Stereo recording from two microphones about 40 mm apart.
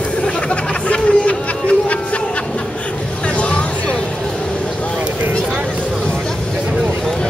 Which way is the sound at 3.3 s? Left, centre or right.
Left.